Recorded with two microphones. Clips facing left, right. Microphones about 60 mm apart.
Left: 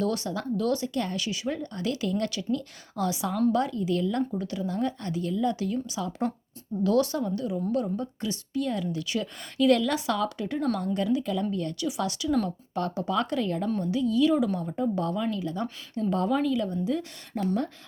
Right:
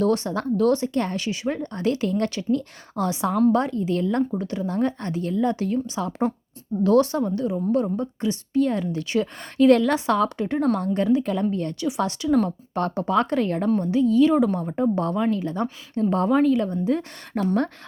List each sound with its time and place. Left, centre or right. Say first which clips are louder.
0.0 s a woman's voice: right 6 dB; right
13.7 s a woman's voice: right 6 dB; right
17.3 s speech: right 5 dB; right